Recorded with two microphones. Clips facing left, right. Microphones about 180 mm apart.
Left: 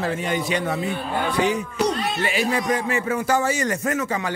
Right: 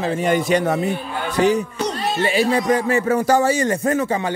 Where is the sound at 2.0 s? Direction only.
35° right (ahead or behind).